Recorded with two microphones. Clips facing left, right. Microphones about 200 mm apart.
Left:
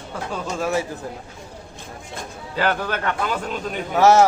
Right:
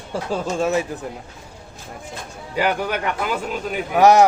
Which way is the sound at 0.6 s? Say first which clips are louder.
Right 2 dB; 20° right (ahead or behind).